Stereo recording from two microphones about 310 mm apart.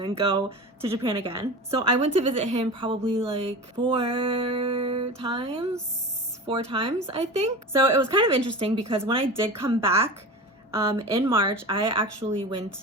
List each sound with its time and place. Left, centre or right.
0.0 s a woman's voice: centre